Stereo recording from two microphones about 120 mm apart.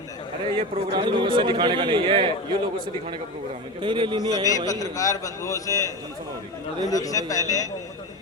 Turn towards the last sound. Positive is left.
turn(degrees=30)  # may be behind; listen again after turning